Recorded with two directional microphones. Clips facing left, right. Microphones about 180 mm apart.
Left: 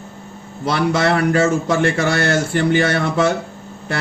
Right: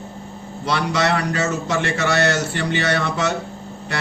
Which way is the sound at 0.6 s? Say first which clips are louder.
Left 3 dB; 50° left (ahead or behind).